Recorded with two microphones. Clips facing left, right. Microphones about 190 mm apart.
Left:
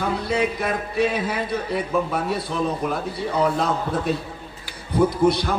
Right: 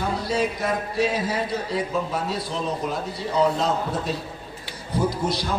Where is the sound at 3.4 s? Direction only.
60° left (ahead or behind).